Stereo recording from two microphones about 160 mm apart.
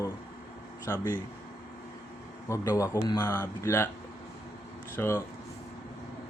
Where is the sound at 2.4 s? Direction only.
20° left (ahead or behind).